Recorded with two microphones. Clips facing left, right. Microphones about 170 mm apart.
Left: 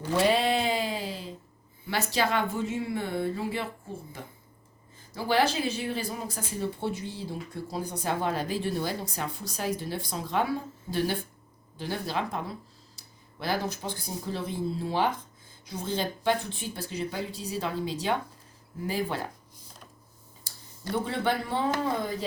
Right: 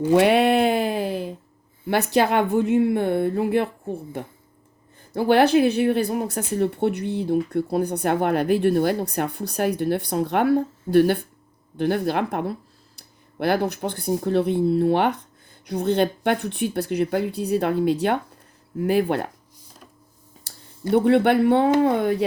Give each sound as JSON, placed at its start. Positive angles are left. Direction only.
{"t": 0.1, "sound": "a sound", "side_deg": -65}
{"t": 1.9, "sound": "speech", "side_deg": -55}
{"t": 20.9, "sound": "speech", "side_deg": -65}